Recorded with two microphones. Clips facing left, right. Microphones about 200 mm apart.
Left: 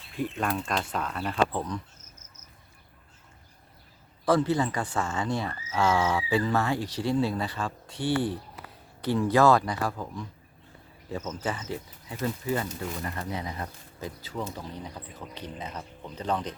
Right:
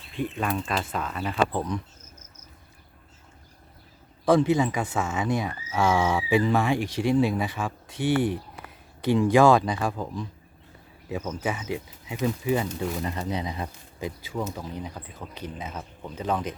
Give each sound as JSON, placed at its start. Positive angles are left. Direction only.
{"t": 0.2, "sound": "speech", "side_deg": 0}
{"t": 4.3, "sound": "speech", "side_deg": -15}
{"t": 9.0, "sound": "speech", "side_deg": -15}